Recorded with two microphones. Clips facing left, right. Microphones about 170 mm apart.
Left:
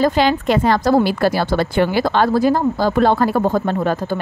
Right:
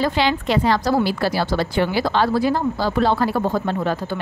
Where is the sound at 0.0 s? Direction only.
45° left (ahead or behind).